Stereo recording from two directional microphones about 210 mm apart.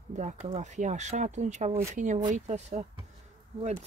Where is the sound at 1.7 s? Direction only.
10° right (ahead or behind).